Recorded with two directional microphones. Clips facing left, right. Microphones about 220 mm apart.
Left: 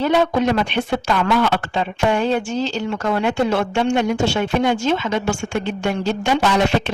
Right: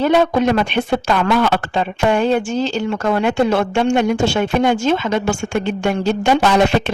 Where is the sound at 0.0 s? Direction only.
55° right (ahead or behind).